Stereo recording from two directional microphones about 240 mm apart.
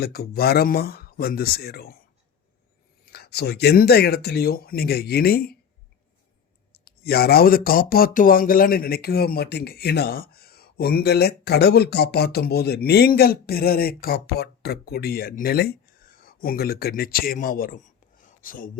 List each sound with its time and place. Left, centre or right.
0.0 s speech: left
3.1 s speech: left
6.8 s speech: left